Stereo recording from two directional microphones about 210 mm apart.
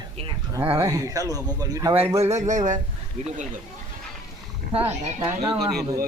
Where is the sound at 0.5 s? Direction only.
10° right (ahead or behind).